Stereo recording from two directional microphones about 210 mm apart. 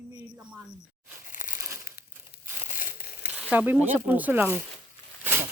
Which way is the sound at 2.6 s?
40° left (ahead or behind).